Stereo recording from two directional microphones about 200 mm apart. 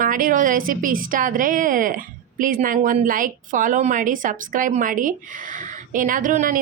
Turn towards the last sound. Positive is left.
turn(degrees=-40)  # may be behind; listen again after turning